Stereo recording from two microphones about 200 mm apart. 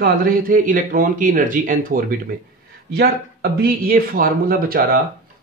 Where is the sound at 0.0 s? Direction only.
45° right (ahead or behind).